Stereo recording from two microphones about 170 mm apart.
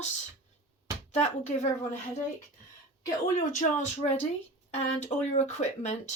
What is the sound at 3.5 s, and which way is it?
Speech, 45° left (ahead or behind).